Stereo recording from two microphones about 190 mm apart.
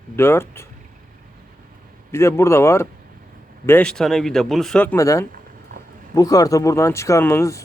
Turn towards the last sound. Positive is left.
turn(degrees=15)  # may be behind; listen again after turning